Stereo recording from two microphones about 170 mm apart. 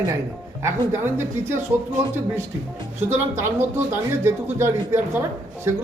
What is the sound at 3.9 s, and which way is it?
Speech, 15° right (ahead or behind).